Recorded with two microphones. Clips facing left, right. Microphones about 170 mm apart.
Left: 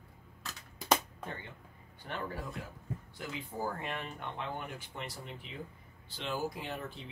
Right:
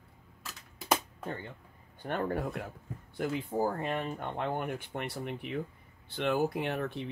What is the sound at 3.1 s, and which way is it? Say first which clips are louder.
Speech: right 11 dB; 45° right (ahead or behind).